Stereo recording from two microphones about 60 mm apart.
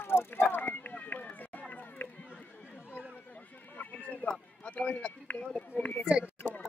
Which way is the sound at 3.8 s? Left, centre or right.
Left.